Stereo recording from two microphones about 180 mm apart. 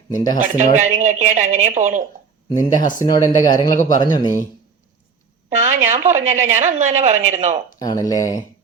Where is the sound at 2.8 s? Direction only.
45° left (ahead or behind).